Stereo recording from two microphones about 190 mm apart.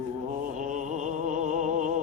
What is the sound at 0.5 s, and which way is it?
Music, 40° right (ahead or behind).